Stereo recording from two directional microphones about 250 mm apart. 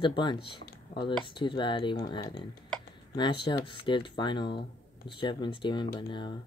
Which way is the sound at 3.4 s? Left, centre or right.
Left.